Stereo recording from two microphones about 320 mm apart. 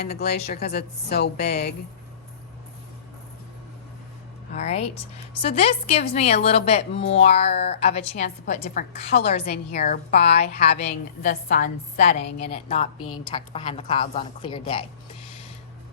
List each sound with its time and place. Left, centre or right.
0.0 s a woman's voice: left
4.5 s a woman's voice: centre
9.1 s a woman's voice: left